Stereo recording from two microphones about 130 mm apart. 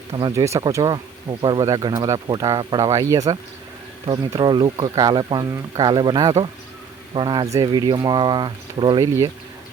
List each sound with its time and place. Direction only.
0.2 s speech: 30° right (ahead or behind)